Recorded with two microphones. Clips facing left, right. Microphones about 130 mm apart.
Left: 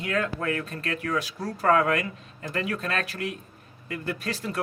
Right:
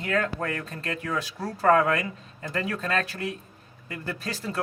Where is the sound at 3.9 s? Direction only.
30° right (ahead or behind).